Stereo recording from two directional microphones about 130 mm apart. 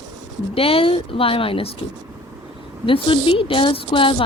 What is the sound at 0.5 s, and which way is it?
A woman's voice, 45° left (ahead or behind).